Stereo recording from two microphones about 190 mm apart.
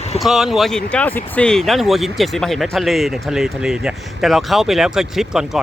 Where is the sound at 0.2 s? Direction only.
Centre (ahead or behind).